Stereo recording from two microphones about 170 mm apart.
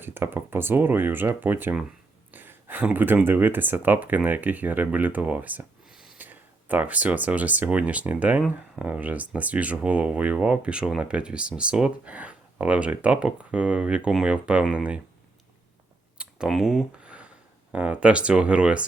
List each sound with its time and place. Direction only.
0.0 s speech: 10° right (ahead or behind)
16.1 s a sound: 5° right (ahead or behind)
17.7 s speech: 5° right (ahead or behind)